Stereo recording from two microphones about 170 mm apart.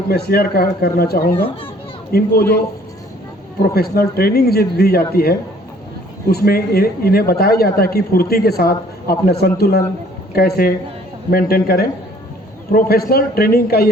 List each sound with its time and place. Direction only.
0.1 s speech: 65° left (ahead or behind)
3.6 s speech: 65° left (ahead or behind)
13.1 s speech: 65° left (ahead or behind)